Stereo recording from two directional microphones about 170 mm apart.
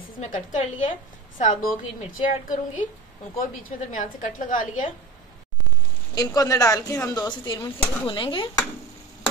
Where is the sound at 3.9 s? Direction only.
50° left (ahead or behind).